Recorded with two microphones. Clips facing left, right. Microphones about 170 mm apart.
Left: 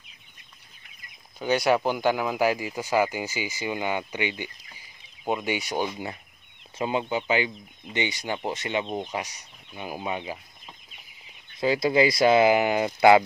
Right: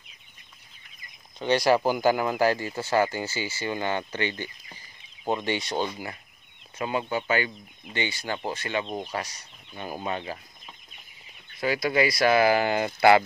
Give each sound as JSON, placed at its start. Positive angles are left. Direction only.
{"t": 1.4, "sound": "speech", "side_deg": 5}
{"t": 6.8, "sound": "speech", "side_deg": 20}
{"t": 11.6, "sound": "speech", "side_deg": 25}